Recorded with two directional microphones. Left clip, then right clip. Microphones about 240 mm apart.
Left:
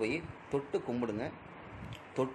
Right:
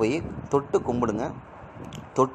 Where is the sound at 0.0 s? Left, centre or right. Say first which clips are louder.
Right 10 dB; right.